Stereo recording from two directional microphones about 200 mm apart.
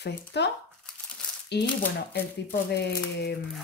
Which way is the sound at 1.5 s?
55° left (ahead or behind).